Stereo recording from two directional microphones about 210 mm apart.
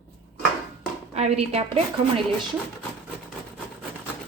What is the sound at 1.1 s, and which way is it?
Speech, 30° right (ahead or behind).